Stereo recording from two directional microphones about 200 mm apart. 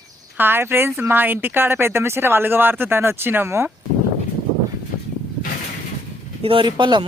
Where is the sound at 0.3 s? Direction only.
10° right (ahead or behind).